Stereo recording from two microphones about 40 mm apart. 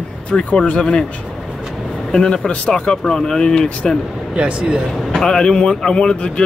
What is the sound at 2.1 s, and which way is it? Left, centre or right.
Speech, left.